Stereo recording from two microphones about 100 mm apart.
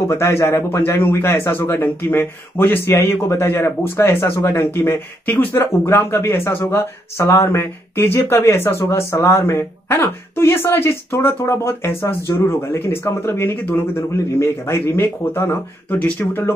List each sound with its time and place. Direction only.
0.1 s speech: 30° left (ahead or behind)